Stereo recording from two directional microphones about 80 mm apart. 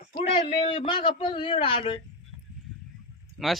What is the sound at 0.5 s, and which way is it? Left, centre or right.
Speech, left.